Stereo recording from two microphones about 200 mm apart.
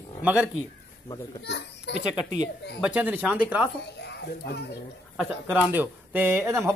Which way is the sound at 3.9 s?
55° left (ahead or behind).